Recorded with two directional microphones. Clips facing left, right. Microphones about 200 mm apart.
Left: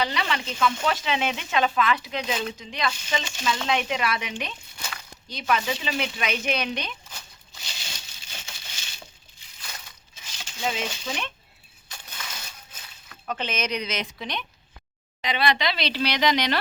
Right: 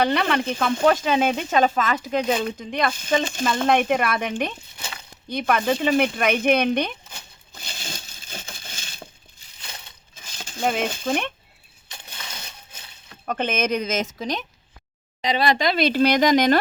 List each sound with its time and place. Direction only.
0.0 s speech: 55° right (ahead or behind)
4.8 s a sound: 25° right (ahead or behind)
5.3 s speech: 55° right (ahead or behind)
7.5 s crushing: 50° right (ahead or behind)
9.6 s crushing: 25° right (ahead or behind)
10.2 s a sound: 50° right (ahead or behind)
11.9 s crushing: 30° right (ahead or behind)
13.2 s speech: 50° right (ahead or behind)